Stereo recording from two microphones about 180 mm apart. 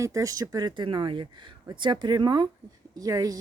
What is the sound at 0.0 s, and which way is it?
Speech, 20° right (ahead or behind).